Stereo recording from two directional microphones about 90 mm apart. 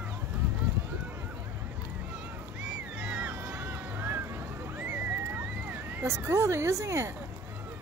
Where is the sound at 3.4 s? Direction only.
15° right (ahead or behind).